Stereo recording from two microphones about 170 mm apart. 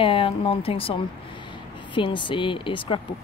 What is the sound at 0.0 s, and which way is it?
Speech, 30° left (ahead or behind).